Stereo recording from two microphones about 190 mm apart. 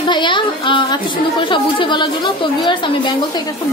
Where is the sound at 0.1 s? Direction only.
25° left (ahead or behind).